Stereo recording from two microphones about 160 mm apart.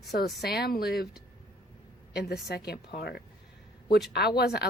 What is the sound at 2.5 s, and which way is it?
Speech, 85° left.